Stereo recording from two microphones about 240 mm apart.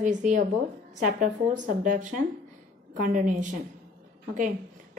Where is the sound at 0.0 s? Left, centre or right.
Right.